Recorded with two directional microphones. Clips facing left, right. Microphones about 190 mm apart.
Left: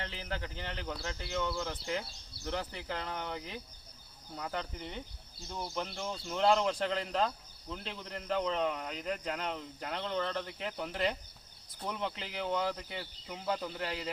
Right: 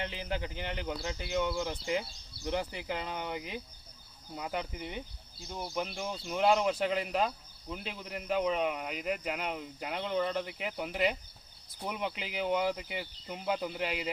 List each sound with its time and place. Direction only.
0.0 s speech: 15° right (ahead or behind)